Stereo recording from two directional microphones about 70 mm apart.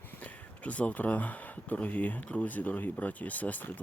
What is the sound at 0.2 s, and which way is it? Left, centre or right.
Speech, centre.